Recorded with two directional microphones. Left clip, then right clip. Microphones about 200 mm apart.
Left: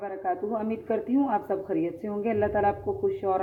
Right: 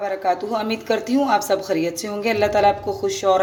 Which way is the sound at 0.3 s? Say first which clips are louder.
Right 6 dB; 10° right (ahead or behind).